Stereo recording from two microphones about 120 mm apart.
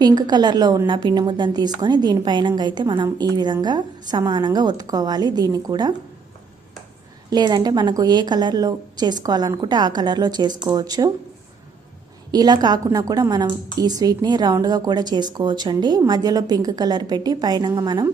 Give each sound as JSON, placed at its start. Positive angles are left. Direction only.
{"t": 0.0, "sound": "a woman's voice", "side_deg": -35}
{"t": 7.3, "sound": "a woman's voice", "side_deg": -35}
{"t": 12.3, "sound": "a woman's voice", "side_deg": -35}